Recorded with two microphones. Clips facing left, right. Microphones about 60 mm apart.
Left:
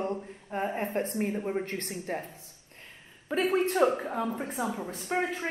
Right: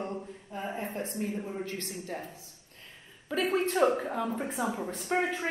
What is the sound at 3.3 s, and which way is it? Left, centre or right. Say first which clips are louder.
Speech: left 2 dB; left.